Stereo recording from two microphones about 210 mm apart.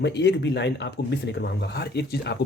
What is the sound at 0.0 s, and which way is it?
Speech, 55° left (ahead or behind).